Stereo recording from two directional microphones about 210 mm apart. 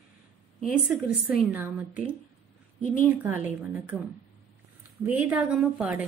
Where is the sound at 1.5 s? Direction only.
10° right (ahead or behind).